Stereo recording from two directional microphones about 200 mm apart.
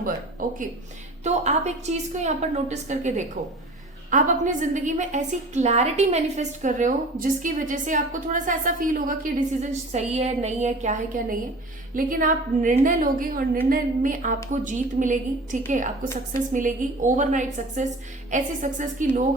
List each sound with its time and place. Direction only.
1.2 s a woman's voice: 35° right (ahead or behind)